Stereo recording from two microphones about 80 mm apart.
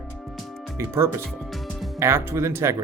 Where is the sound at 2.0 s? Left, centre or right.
Right.